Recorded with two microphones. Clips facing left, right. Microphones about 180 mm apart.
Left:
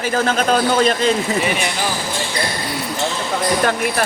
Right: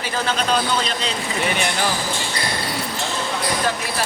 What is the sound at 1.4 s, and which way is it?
Speech, centre (ahead or behind).